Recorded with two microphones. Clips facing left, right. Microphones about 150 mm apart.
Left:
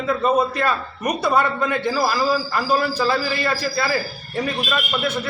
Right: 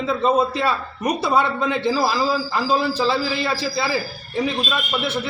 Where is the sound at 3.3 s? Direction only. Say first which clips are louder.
Even; 10° right (ahead or behind).